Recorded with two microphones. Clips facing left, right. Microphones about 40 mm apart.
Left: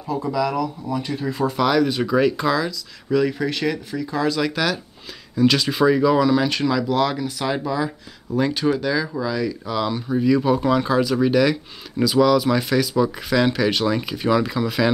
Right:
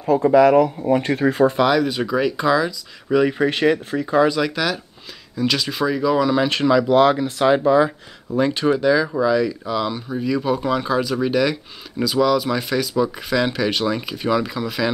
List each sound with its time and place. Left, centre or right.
0.1 s speech: right
1.6 s speech: centre
3.1 s speech: right
4.3 s speech: centre
6.4 s speech: centre